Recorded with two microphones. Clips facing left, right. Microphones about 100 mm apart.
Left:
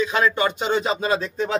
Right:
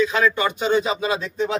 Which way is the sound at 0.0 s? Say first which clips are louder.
Right 1 dB; 30° left (ahead or behind).